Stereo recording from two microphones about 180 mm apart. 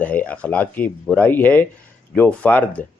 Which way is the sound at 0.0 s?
10° left (ahead or behind).